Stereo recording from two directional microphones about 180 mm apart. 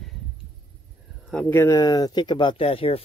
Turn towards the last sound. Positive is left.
turn(degrees=30)  # may be behind; listen again after turning